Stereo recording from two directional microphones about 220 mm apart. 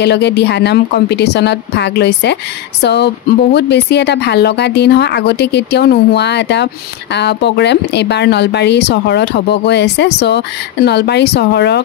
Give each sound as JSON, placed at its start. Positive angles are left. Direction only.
{"t": 0.0, "sound": "speech", "side_deg": 50}